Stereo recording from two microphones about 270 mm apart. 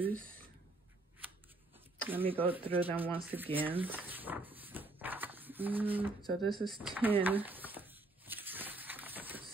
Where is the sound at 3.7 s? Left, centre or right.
Centre.